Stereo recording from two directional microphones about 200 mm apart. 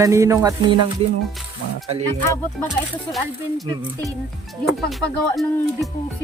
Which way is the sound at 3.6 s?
20° right (ahead or behind).